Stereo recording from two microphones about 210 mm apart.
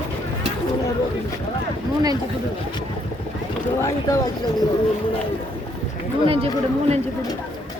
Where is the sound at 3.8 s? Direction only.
15° left (ahead or behind).